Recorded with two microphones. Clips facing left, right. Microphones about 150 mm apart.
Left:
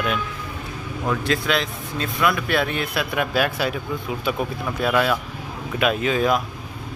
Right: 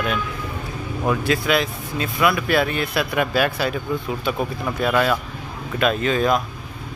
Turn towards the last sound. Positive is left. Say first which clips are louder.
# right 1 dB
turn(degrees=5)  # may be behind; listen again after turning